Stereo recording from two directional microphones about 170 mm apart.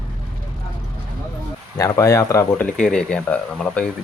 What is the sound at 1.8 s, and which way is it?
Speech, 20° left (ahead or behind).